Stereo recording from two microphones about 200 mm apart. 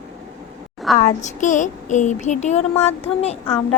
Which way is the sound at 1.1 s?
35° left (ahead or behind).